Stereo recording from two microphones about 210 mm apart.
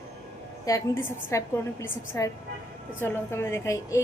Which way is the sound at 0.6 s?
15° left (ahead or behind).